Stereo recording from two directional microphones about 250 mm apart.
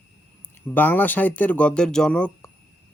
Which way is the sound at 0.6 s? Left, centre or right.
Centre.